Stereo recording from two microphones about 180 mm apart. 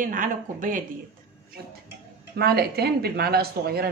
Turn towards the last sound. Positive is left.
turn(degrees=-60)  # may be behind; listen again after turning